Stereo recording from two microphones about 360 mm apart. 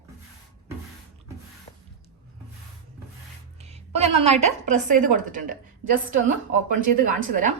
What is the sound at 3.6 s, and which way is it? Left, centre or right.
A woman's voice, centre.